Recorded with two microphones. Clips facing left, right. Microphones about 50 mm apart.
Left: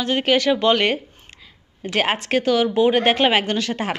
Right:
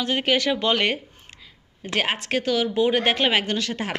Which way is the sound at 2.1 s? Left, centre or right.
Centre.